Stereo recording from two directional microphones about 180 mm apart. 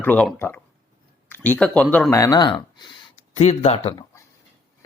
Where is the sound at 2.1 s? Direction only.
20° left (ahead or behind).